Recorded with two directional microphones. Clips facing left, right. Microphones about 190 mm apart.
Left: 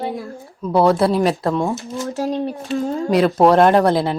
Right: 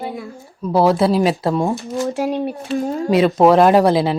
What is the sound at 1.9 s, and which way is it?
Speech, 15° right (ahead or behind).